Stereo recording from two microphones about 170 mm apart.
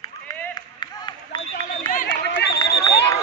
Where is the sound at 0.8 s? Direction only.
25° left (ahead or behind).